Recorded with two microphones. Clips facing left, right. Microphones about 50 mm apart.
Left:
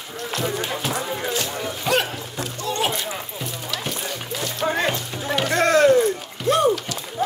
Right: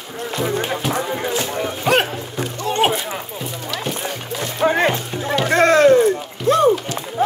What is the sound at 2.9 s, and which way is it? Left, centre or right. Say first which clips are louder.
Music: right 4 dB; right.